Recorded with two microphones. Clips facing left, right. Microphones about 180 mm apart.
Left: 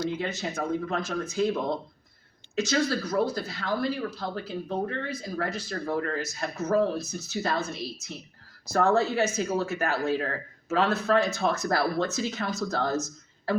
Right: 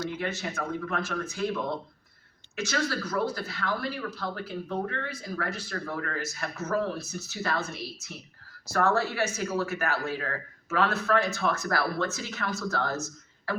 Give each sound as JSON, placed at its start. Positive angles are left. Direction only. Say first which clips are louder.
{"t": 0.0, "sound": "speech", "louder": "left 2 dB", "side_deg": 20}
{"t": 2.6, "sound": "speech", "louder": "left 4 dB", "side_deg": 20}